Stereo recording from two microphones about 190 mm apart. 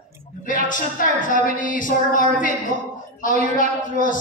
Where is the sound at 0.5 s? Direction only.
45° left (ahead or behind).